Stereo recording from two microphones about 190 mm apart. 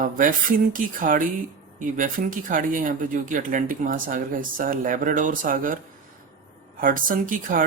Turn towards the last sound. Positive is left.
turn(degrees=-45)  # may be behind; listen again after turning